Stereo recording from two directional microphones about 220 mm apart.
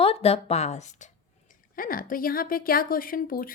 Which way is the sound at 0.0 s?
25° left (ahead or behind).